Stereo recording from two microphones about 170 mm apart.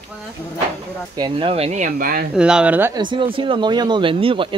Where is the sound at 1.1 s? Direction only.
30° right (ahead or behind); by 2.2 s 55° right (ahead or behind).